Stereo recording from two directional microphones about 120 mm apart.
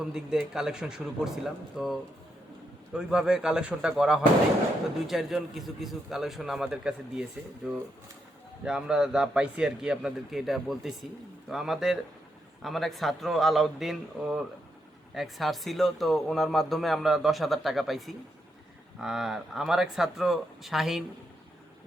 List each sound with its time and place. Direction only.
0.0 s a man's voice: 5° right (ahead or behind)